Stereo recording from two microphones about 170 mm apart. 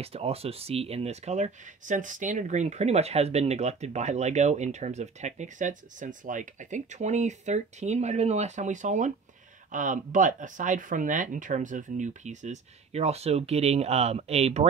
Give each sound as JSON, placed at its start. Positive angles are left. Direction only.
{"t": 0.0, "sound": "speech", "side_deg": -35}